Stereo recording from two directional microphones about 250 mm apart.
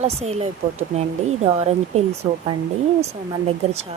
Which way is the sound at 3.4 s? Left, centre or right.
Right.